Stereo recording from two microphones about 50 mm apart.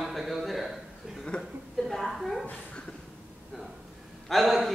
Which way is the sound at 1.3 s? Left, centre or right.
Left.